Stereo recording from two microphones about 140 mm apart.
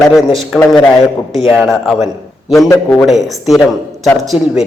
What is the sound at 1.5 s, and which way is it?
Speech, centre (ahead or behind).